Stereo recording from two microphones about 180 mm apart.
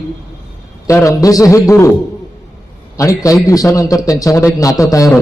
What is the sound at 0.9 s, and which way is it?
A man's voice, 15° left (ahead or behind).